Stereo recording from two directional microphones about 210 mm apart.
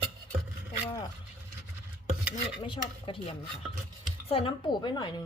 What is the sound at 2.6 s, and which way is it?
A woman's voice, 20° left (ahead or behind).